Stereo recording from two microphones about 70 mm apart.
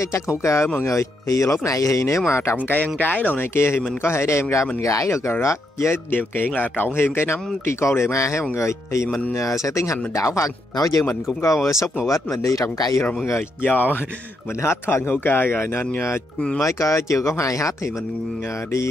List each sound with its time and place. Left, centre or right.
0.0 s speech: left
2.5 s speech: left
6.0 s speech: left
13.6 s speech: left
14.6 s speech: left
16.6 s speech: left